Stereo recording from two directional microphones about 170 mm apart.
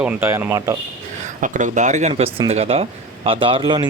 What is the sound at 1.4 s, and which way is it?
Speech, 45° right (ahead or behind).